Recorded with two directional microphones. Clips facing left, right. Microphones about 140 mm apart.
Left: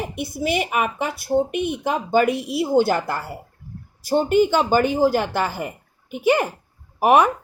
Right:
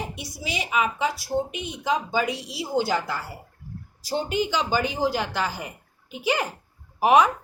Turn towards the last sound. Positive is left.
turn(degrees=55)  # may be behind; listen again after turning